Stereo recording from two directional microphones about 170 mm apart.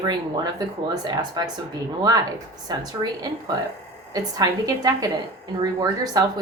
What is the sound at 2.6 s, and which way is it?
A woman's voice, 25° right (ahead or behind).